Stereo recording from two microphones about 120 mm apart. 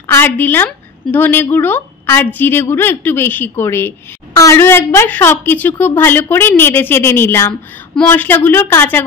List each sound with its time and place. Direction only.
0.0 s a woman's voice: 20° left (ahead or behind)